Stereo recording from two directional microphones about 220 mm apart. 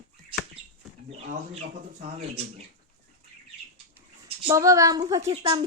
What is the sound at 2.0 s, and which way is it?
Speech, 25° right (ahead or behind).